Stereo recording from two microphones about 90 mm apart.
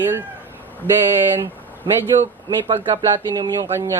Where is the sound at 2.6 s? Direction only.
65° right (ahead or behind).